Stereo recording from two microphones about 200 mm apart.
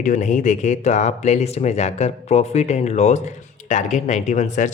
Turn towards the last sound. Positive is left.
turn(degrees=35)  # may be behind; listen again after turning